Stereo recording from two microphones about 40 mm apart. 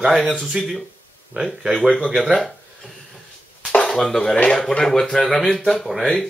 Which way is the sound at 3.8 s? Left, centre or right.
Centre.